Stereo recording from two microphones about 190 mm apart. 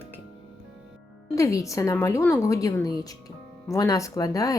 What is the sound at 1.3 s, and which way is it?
Speech, 15° left (ahead or behind).